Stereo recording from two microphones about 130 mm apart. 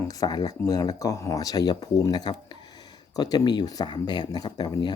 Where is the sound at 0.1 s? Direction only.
30° left (ahead or behind).